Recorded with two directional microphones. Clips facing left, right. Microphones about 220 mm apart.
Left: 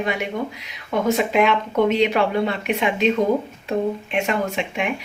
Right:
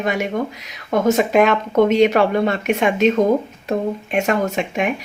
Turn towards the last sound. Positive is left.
turn(degrees=-45)  # may be behind; listen again after turning